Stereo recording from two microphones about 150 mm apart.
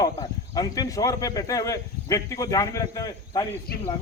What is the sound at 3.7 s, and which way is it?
Speech, 90° left.